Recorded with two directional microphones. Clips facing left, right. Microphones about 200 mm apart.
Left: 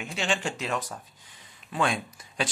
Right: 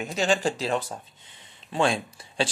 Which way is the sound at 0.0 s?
40° right (ahead or behind).